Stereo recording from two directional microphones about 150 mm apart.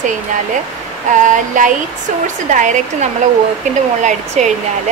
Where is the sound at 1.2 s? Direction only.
60° right (ahead or behind).